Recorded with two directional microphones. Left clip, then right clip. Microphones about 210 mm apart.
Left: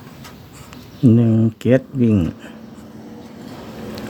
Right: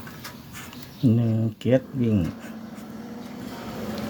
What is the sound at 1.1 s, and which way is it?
Speech, 45° left (ahead or behind).